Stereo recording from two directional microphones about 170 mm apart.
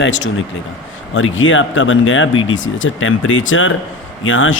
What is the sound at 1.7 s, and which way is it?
Speech, 90° left.